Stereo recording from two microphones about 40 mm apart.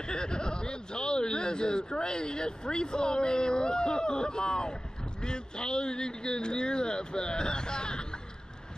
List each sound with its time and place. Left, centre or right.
0.0 s a man's voice: left